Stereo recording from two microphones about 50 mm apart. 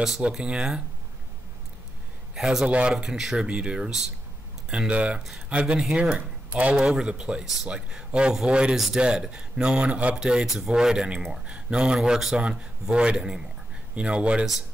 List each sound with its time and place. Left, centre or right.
0.4 s speech: centre
2.3 s speech: centre
8.7 s speech: centre
9.0 s speech: centre
10.1 s speech: centre
12.4 s speech: right